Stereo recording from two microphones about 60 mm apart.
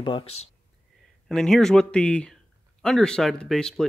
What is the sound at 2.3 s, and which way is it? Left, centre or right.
Speech, centre.